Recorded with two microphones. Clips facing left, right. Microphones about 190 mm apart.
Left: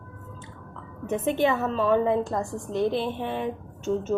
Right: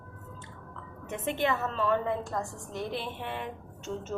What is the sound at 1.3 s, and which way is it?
A woman's voice, 15° left (ahead or behind).